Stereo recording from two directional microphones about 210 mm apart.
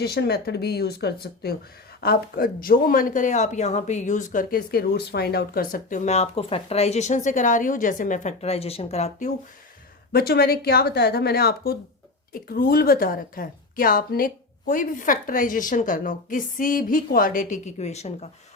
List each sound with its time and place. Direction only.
0.0 s speech: 50° left (ahead or behind); by 9.3 s 35° left (ahead or behind)
10.1 s speech: 50° left (ahead or behind); by 18.3 s 30° left (ahead or behind)